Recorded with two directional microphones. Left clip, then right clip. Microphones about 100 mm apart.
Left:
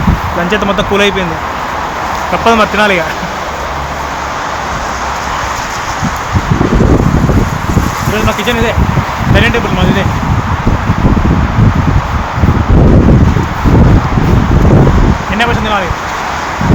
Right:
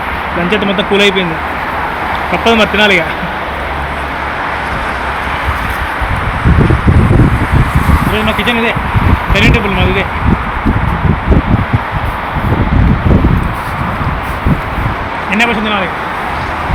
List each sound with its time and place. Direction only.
0.5 s speech: 60° left (ahead or behind)
2.3 s speech: 45° left (ahead or behind)
8.1 s speech: 60° left (ahead or behind)
9.3 s speech: 40° left (ahead or behind)